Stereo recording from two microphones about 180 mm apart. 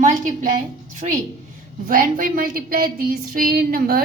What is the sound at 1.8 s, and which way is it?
A woman's voice, 50° right (ahead or behind).